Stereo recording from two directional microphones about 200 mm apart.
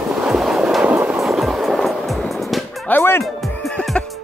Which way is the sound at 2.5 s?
10° left (ahead or behind).